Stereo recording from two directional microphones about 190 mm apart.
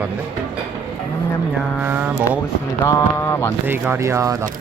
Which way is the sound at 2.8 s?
15° left (ahead or behind).